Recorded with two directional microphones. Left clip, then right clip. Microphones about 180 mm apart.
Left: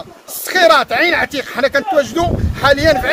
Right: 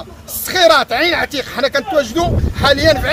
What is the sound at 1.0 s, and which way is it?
Speech, 40° left (ahead or behind).